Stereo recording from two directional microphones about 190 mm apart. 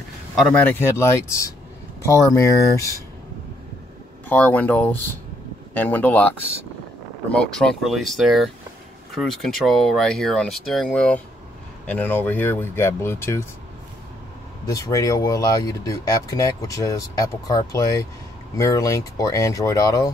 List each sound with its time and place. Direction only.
0.4 s speech: 5° left (ahead or behind)
4.3 s speech: 10° left (ahead or behind)
14.7 s speech: 15° left (ahead or behind)